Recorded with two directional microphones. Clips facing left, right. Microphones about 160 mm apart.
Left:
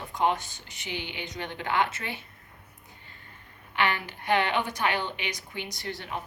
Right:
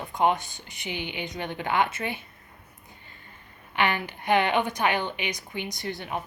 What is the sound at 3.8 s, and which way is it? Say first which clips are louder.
Speech: right 2 dB; 15° right (ahead or behind).